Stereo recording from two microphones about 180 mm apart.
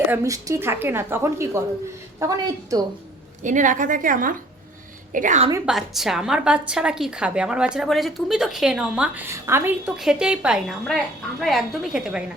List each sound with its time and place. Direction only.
0.1 s a woman's voice: 15° right (ahead or behind)
3.4 s a woman's voice: 45° right (ahead or behind)
5.6 s a woman's voice: centre (ahead or behind)